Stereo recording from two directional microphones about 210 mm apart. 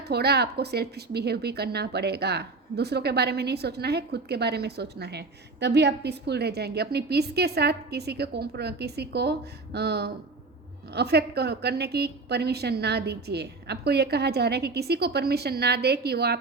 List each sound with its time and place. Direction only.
0.1 s a woman's voice: 50° right (ahead or behind)